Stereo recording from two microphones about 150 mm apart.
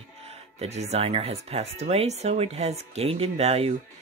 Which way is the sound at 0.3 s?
45° right (ahead or behind).